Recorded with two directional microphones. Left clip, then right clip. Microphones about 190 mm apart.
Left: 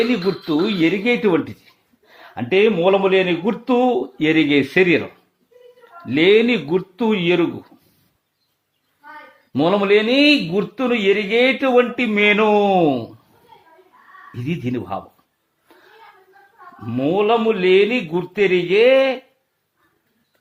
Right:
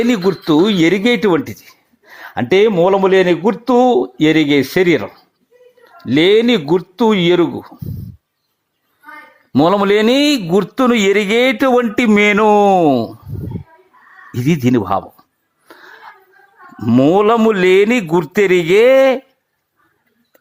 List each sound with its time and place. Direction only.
0.1 s speech: 40° right (ahead or behind)
9.5 s a man's voice: 35° right (ahead or behind)
14.3 s a man's voice: 45° right (ahead or behind)
16.8 s a man's voice: 45° right (ahead or behind)